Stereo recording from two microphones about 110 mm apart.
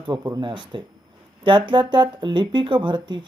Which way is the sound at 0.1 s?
40° right (ahead or behind).